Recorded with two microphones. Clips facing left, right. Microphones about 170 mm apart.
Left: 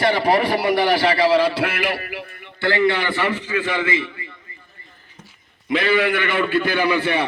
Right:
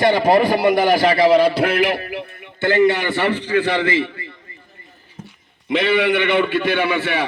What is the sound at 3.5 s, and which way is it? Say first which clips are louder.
Speech: right 4 dB; 35° right (ahead or behind).